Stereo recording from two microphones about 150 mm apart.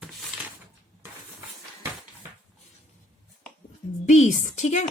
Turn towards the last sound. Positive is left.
turn(degrees=50)  # may be behind; listen again after turning